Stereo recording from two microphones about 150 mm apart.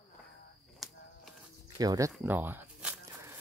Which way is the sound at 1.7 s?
25° right (ahead or behind).